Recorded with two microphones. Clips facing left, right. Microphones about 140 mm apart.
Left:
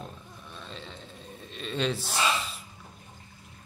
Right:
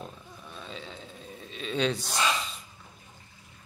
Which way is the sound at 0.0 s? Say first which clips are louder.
Even; centre (ahead or behind).